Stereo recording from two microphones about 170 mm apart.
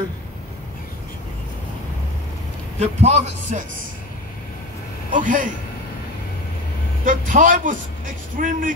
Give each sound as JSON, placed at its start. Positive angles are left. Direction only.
{"t": 2.8, "sound": "a man's voice", "side_deg": -40}
{"t": 5.1, "sound": "a man's voice", "side_deg": -50}
{"t": 7.1, "sound": "a man's voice", "side_deg": -50}